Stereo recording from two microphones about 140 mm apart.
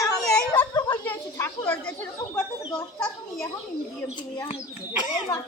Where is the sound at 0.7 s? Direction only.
25° left (ahead or behind).